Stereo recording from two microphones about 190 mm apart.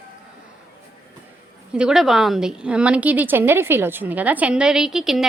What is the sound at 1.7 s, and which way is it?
A woman's voice, 5° right (ahead or behind).